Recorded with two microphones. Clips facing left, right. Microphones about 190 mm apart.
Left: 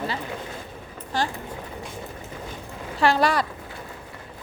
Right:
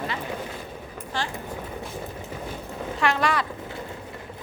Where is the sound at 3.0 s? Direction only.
35° left (ahead or behind).